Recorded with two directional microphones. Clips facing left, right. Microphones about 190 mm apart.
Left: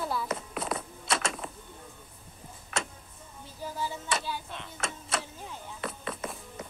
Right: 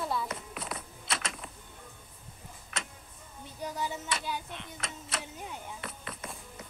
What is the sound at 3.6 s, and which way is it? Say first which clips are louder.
Tick: even; 20° right (ahead or behind).